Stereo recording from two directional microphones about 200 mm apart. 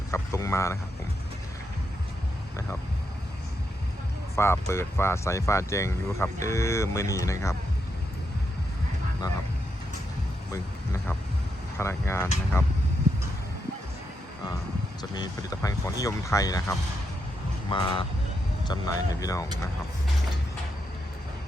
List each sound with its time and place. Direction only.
0.1 s speech: 15° left (ahead or behind)
4.4 s speech: 15° left (ahead or behind)
11.8 s speech: 15° left (ahead or behind)
15.1 s speech: 20° left (ahead or behind)